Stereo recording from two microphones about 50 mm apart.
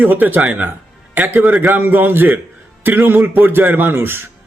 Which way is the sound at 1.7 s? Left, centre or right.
Right.